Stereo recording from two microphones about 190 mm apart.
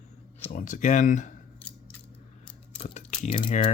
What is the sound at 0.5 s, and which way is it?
Speech, 45° left (ahead or behind).